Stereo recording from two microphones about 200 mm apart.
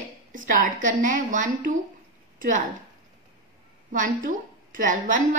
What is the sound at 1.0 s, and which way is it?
Speech, 40° right (ahead or behind).